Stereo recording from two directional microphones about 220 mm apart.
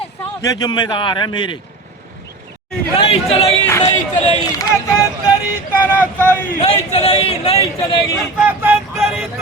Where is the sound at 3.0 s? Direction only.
25° left (ahead or behind).